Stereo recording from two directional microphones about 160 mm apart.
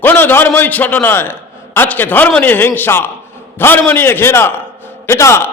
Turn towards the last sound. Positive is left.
turn(degrees=15)  # may be behind; listen again after turning